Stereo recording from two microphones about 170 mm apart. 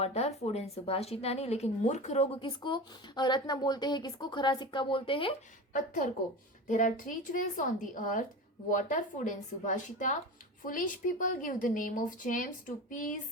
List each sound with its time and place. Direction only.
0.0 s a woman's voice: 40° left (ahead or behind)
6.7 s speech: 50° left (ahead or behind)